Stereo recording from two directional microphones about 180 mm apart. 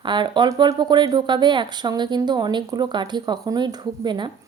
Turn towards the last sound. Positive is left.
turn(degrees=-25)  # may be behind; listen again after turning